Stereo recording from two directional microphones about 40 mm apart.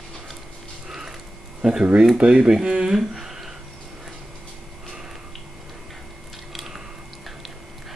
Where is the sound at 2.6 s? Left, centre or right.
Right.